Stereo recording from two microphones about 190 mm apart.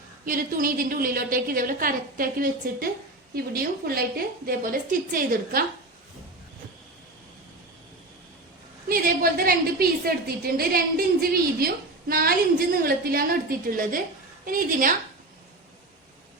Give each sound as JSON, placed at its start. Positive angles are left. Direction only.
{"t": 0.3, "sound": "a woman's voice", "side_deg": -45}
{"t": 8.9, "sound": "a woman's voice", "side_deg": -50}